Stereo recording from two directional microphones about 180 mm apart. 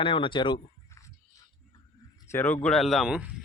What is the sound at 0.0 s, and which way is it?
Speech, 30° left (ahead or behind).